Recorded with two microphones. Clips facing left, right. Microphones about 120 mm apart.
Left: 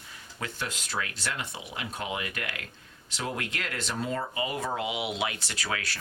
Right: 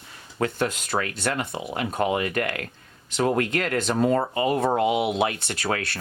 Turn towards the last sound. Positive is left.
turn(degrees=-55)  # may be behind; listen again after turning